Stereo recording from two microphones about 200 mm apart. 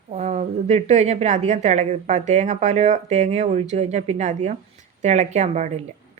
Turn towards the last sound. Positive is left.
turn(degrees=-35)  # may be behind; listen again after turning